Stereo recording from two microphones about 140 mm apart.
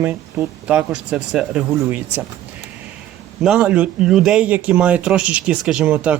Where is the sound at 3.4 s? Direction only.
10° right (ahead or behind).